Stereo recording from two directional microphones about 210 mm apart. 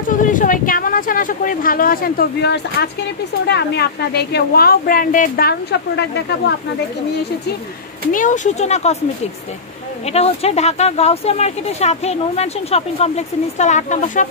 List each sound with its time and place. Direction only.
0.1 s a woman's voice: 40° left (ahead or behind); by 6.5 s 55° left (ahead or behind)
8.1 s speech: 35° left (ahead or behind)
10.1 s speech: 30° left (ahead or behind)